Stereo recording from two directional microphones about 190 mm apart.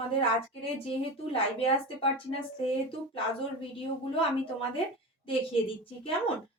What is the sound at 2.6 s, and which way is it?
Speech, 30° left (ahead or behind).